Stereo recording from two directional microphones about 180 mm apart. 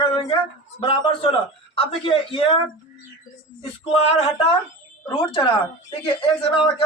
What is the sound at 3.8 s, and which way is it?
A man's voice, 35° left (ahead or behind).